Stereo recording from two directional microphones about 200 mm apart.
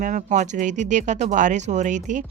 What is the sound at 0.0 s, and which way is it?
Speech, 40° right (ahead or behind).